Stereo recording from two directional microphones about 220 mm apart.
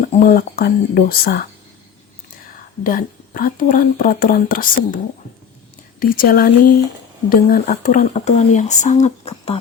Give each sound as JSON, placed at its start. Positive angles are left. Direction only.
{"t": 0.1, "sound": "speech", "side_deg": 40}
{"t": 2.8, "sound": "speech", "side_deg": 40}
{"t": 6.0, "sound": "speech", "side_deg": 40}